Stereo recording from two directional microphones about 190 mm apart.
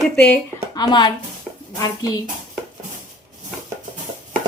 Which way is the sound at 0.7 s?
20° left (ahead or behind).